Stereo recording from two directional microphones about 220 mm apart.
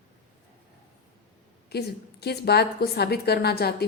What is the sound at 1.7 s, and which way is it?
A woman's voice, 45° left (ahead or behind).